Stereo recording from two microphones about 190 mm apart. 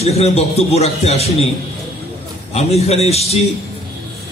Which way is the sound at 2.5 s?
35° left (ahead or behind).